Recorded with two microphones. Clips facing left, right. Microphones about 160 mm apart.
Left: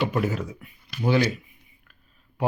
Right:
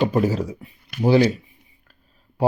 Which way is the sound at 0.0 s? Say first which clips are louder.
Right 5 dB; 35° right (ahead or behind).